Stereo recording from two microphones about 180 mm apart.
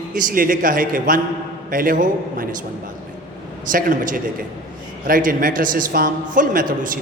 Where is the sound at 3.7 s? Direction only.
50° right (ahead or behind).